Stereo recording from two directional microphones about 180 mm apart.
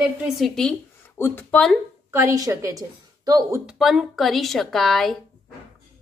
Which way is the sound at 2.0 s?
15° right (ahead or behind).